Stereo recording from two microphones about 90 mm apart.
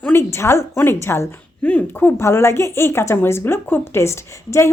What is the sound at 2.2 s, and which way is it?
A woman's voice, 30° left (ahead or behind).